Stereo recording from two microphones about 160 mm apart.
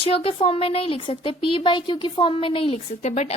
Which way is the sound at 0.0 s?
35° left (ahead or behind).